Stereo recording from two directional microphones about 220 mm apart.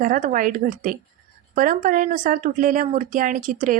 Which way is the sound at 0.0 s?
35° right (ahead or behind).